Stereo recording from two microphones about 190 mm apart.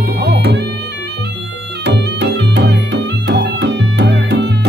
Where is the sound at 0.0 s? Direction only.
60° right (ahead or behind).